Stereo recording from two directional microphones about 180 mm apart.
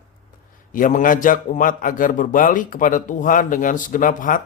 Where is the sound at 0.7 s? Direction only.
45° left (ahead or behind).